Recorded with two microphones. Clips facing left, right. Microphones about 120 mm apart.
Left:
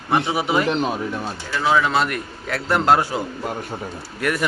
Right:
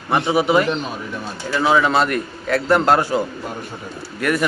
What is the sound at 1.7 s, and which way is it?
A man's voice, centre (ahead or behind).